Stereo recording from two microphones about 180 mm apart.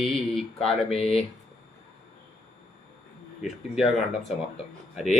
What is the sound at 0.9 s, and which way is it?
Speech, 35° left (ahead or behind).